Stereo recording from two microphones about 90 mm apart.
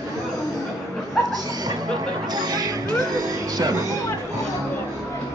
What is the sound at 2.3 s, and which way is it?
Speech, 50° right (ahead or behind).